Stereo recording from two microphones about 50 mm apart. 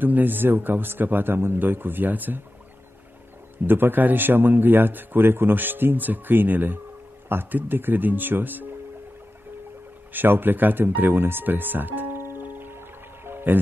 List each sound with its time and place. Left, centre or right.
0.0 s speech: right
3.5 s speech: right
10.1 s a sound: right